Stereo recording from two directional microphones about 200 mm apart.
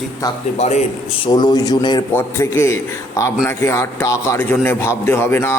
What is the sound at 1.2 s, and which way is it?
A man's voice, 20° left (ahead or behind).